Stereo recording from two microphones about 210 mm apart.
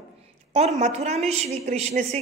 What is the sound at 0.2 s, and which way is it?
A woman's voice, 30° right (ahead or behind).